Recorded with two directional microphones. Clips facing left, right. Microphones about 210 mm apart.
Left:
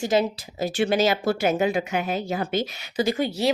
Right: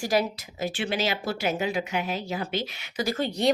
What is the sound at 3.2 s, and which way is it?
Speech, 5° left (ahead or behind).